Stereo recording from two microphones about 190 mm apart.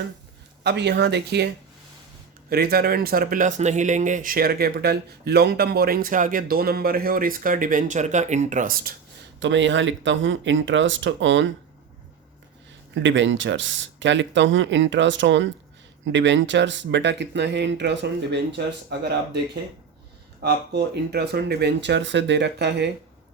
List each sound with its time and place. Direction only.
0.6 s speech: 60° right (ahead or behind)
2.5 s speech: 55° right (ahead or behind)
9.4 s speech: 75° right (ahead or behind)
12.9 s speech: 75° right (ahead or behind)
20.4 s speech: 60° right (ahead or behind)